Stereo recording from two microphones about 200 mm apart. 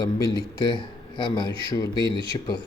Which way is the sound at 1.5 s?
25° right (ahead or behind).